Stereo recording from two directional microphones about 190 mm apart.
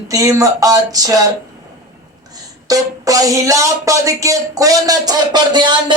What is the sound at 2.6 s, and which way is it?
Speech, 20° right (ahead or behind).